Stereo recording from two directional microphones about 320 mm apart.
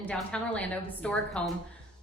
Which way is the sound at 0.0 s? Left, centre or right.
Centre.